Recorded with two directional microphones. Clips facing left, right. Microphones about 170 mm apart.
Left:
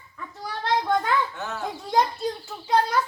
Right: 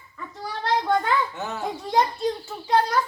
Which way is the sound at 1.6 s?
Centre (ahead or behind).